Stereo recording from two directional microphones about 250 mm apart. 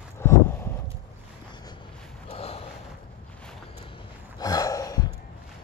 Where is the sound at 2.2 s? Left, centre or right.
Left.